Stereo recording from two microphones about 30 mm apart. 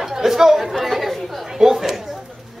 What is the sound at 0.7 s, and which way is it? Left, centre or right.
Speech, centre.